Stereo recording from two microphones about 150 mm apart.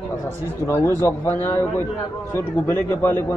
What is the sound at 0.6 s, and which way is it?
A man's voice, 15° left (ahead or behind).